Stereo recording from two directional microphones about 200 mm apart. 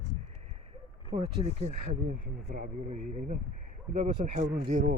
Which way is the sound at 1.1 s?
30° right (ahead or behind).